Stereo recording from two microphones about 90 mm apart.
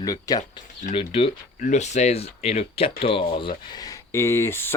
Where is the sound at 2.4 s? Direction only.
90° left; by 3.5 s 75° left (ahead or behind).